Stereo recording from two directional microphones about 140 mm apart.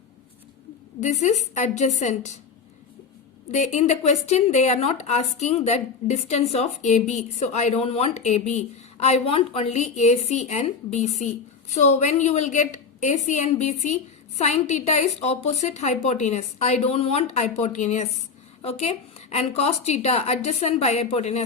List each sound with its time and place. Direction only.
1.0 s a woman's voice: 55° left (ahead or behind)
3.5 s a woman's voice: 55° left (ahead or behind)